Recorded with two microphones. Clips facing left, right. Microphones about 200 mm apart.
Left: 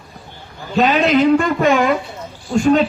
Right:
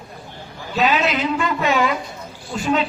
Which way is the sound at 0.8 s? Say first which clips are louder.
Left 6 dB; 45° left (ahead or behind).